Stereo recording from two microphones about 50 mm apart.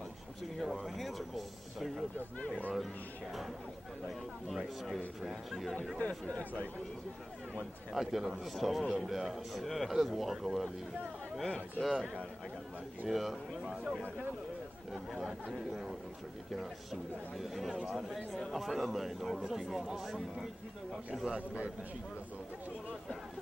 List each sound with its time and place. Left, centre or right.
0.6 s a man's voice: centre
4.6 s a man's voice: centre
5.9 s speech: left
7.9 s a man's voice: centre
11.8 s a man's voice: centre
13.1 s a man's voice: centre
15.5 s a man's voice: centre